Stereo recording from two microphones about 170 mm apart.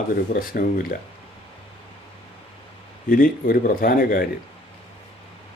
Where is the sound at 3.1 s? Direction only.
55° left (ahead or behind).